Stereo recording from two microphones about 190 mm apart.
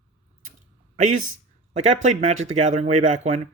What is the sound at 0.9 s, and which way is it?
Speech, 40° right (ahead or behind).